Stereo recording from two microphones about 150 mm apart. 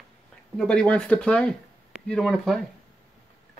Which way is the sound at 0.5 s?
5° left (ahead or behind).